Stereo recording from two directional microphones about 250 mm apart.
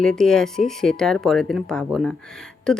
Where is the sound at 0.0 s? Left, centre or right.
Centre.